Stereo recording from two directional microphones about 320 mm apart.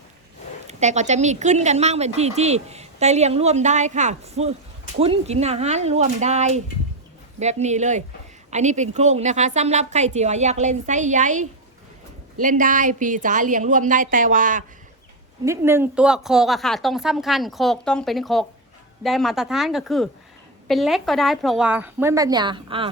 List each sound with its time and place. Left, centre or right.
0.7 s speech: right
15.4 s speech: centre